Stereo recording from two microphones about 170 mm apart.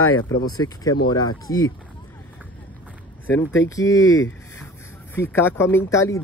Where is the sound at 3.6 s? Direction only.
20° left (ahead or behind).